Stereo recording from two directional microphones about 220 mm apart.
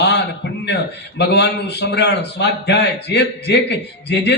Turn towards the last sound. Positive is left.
turn(degrees=50)  # may be behind; listen again after turning